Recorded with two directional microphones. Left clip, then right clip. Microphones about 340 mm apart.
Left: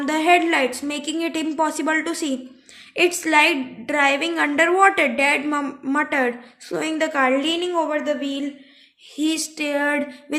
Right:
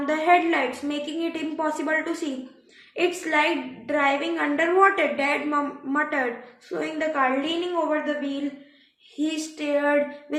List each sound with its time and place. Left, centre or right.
0.0 s a woman's voice: left